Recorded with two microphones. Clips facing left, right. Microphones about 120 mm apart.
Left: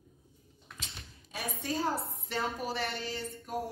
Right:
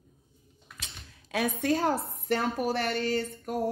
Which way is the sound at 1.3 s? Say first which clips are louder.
Right 9 dB; 70° right (ahead or behind).